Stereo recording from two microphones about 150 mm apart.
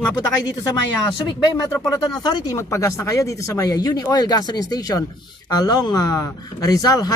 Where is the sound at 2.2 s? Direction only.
25° left (ahead or behind).